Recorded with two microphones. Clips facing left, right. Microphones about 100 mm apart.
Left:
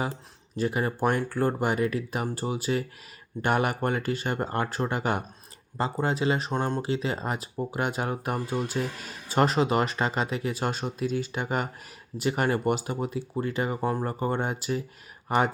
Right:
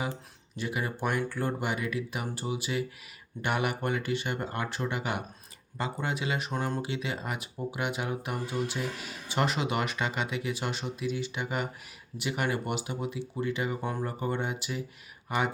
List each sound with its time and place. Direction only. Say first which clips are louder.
0.5 s speech: left 6 dB; 40° left (ahead or behind)